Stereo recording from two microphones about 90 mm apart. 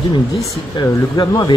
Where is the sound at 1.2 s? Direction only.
45° left (ahead or behind).